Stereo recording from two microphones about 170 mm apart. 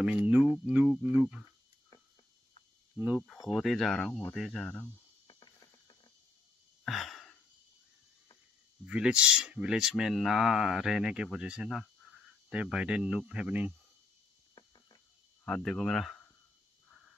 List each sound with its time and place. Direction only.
0.0 s speech: 10° right (ahead or behind)
3.0 s speech: 5° right (ahead or behind)
5.3 s mechanisms: 25° left (ahead or behind)
6.8 s a sound: centre (ahead or behind)
8.8 s speech: 5° right (ahead or behind)
15.4 s speech: 5° left (ahead or behind)